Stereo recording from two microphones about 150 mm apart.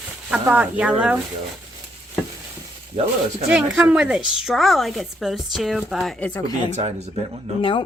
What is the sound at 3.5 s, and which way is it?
A woman's voice, 10° right (ahead or behind).